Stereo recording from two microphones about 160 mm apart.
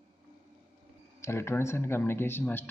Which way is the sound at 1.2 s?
15° left (ahead or behind).